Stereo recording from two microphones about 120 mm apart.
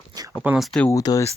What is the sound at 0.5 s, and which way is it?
Speech, centre (ahead or behind).